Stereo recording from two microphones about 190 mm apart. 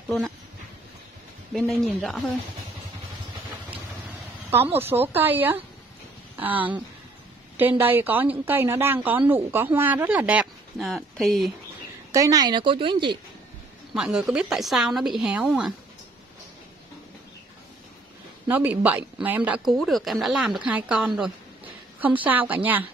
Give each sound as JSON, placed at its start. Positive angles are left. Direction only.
{"t": 1.5, "sound": "a woman's voice", "side_deg": 0}
{"t": 4.5, "sound": "speech", "side_deg": -10}
{"t": 12.1, "sound": "speech", "side_deg": -20}
{"t": 13.9, "sound": "a woman's voice", "side_deg": -5}
{"t": 18.5, "sound": "a woman's voice", "side_deg": -10}